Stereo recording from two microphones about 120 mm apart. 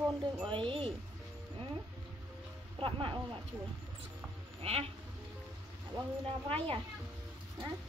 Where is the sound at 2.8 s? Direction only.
45° right (ahead or behind).